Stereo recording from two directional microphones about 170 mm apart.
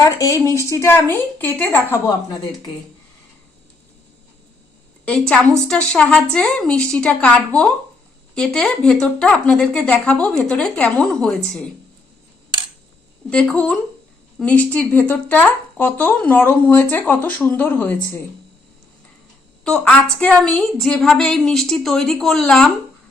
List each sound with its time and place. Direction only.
0.0 s speech: 20° left (ahead or behind)
5.0 s speech: 5° left (ahead or behind)
13.3 s speech: 5° left (ahead or behind)
19.6 s speech: 5° left (ahead or behind)